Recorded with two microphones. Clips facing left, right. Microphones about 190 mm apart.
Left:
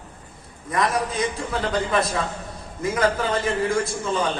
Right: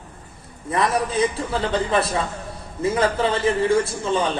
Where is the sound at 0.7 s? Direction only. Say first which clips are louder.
Right 2 dB; 30° right (ahead or behind).